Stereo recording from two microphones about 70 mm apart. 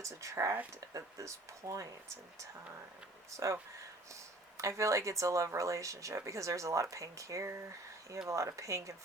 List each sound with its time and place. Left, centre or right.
0.0 s speech: right
3.2 s speech: right